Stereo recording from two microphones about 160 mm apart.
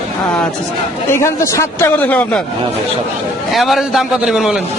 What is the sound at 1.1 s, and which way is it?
A man's voice, 15° left (ahead or behind).